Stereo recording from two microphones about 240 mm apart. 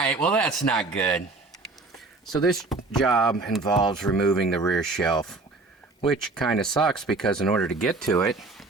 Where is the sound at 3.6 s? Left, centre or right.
Centre.